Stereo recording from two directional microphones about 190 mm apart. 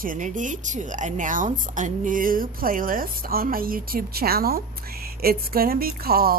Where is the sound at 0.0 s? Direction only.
45° right (ahead or behind).